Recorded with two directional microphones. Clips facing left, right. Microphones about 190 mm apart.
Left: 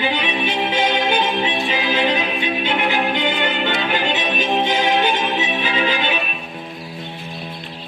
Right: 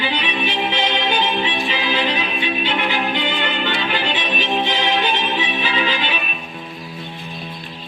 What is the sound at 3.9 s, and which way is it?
Music, 45° left (ahead or behind).